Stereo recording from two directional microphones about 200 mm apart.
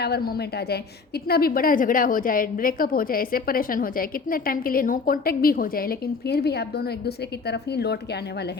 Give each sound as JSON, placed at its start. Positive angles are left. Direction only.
{"t": 0.0, "sound": "a woman's voice", "side_deg": 50}